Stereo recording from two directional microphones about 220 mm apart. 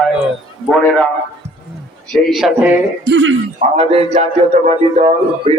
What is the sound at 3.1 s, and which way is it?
Speech, 60° right (ahead or behind).